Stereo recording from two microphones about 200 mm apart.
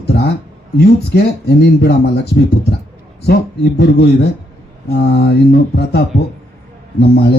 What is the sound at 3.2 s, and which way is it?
A man's voice, 55° left (ahead or behind).